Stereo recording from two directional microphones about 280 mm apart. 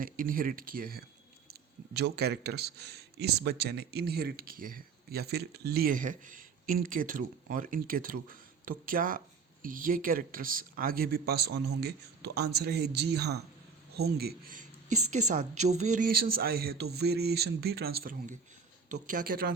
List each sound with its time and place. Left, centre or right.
0.0 s speech: right
14.3 s speech: right
15.0 s a sound: right
16.4 s speech: right